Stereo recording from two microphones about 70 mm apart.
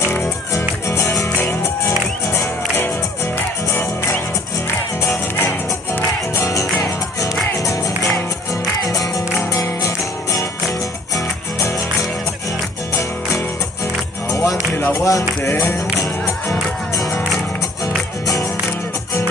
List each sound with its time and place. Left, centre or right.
0.0 s music: left
5.0 s music: left
6.4 s music: left
8.8 s music: left
14.3 s music: left
14.7 s music: left
15.0 s music: left
16.0 s music: left
18.2 s music: left